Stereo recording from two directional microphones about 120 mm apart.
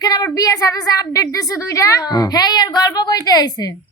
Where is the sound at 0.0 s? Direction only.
30° left (ahead or behind).